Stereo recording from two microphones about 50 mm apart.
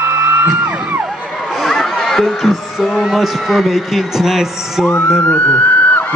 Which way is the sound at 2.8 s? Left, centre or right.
Centre.